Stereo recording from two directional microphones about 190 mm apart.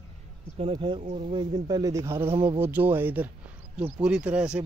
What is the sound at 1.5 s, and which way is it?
Speech, 20° right (ahead or behind).